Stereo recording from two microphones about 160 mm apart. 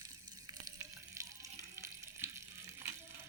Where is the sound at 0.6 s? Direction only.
20° right (ahead or behind).